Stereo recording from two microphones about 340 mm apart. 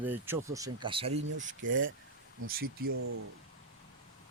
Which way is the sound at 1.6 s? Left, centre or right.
Right.